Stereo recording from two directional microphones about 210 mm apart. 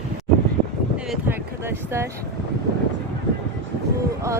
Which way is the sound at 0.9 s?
5° right (ahead or behind).